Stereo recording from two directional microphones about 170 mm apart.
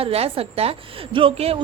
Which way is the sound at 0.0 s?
35° right (ahead or behind).